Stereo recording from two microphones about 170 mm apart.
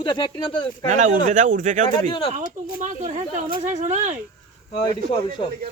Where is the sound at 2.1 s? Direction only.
30° left (ahead or behind).